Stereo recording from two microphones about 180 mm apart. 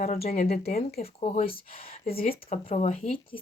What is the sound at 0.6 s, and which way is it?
A woman's voice, 40° left (ahead or behind).